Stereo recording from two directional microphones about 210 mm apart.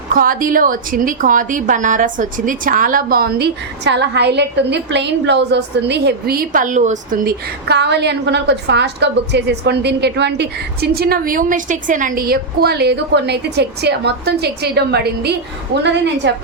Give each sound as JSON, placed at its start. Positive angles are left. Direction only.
{"t": 0.1, "sound": "a woman's voice", "side_deg": -40}